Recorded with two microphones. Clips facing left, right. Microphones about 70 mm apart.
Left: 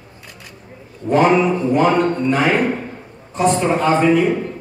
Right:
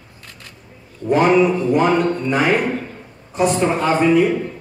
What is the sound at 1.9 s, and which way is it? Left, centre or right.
Speech, left.